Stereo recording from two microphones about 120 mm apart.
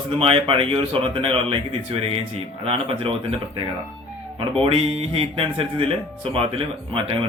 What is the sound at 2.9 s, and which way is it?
Speech, 45° right (ahead or behind).